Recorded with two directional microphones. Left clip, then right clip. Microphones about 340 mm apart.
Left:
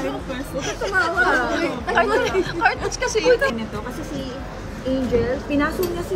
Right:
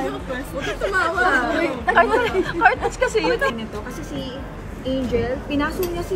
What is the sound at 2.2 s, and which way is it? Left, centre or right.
Speech, centre.